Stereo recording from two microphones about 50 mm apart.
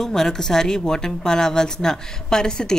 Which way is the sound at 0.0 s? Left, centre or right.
Centre.